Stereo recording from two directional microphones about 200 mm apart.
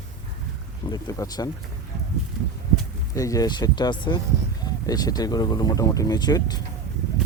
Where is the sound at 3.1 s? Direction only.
15° left (ahead or behind).